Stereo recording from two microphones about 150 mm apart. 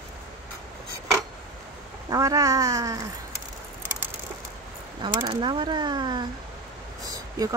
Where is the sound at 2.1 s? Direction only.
25° right (ahead or behind).